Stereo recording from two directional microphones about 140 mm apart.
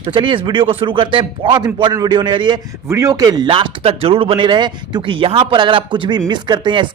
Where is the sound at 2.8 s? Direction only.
20° right (ahead or behind).